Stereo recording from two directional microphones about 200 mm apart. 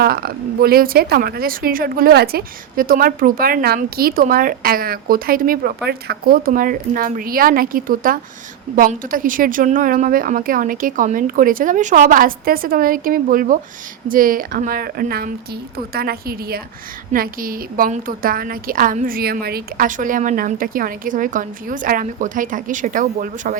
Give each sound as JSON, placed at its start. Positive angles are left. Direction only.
{"t": 0.0, "sound": "a woman's voice", "side_deg": -50}